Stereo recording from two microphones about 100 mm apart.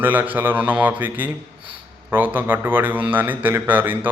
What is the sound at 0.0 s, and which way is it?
Speech, 15° right (ahead or behind).